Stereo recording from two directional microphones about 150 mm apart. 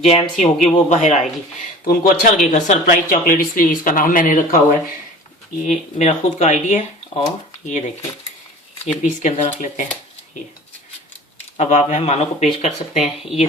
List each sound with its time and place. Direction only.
0.0 s speech: 45° left (ahead or behind)
1.9 s speech: 80° left
2.4 s speech: 55° left (ahead or behind)
5.6 s speech: 50° left (ahead or behind)
8.9 s speech: 50° left (ahead or behind)
11.5 s speech: 45° left (ahead or behind)